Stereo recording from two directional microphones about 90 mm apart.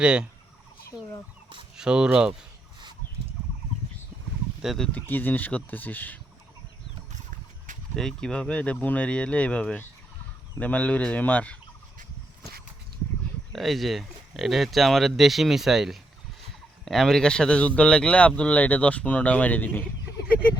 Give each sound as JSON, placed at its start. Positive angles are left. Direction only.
{"t": 0.0, "sound": "fowl", "side_deg": -10}
{"t": 1.7, "sound": "speech", "side_deg": -10}
{"t": 4.6, "sound": "speech", "side_deg": 0}
{"t": 4.9, "sound": "speech", "side_deg": 20}
{"t": 7.9, "sound": "speech", "side_deg": 5}
{"t": 13.5, "sound": "speech", "side_deg": 0}